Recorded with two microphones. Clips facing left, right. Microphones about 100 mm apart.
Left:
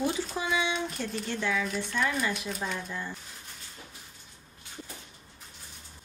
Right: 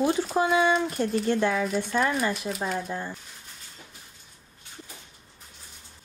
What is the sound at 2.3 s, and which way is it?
Speech, centre (ahead or behind).